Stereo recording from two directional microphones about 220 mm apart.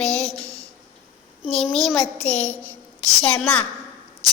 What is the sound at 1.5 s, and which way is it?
Child singing, centre (ahead or behind).